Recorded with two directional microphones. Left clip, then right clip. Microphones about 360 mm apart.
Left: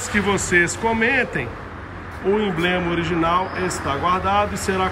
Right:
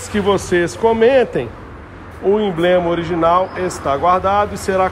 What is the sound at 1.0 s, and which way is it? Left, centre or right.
Speech, right.